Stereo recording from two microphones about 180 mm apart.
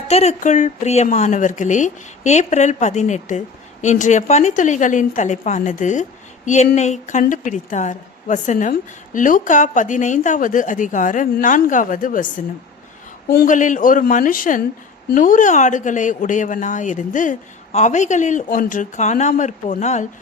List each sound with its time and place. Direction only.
0.1 s a woman's voice: 35° left (ahead or behind)
13.3 s a woman's voice: 50° left (ahead or behind)